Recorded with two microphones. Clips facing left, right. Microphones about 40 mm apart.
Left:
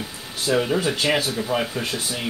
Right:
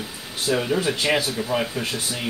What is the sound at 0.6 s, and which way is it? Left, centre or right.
Speech, centre.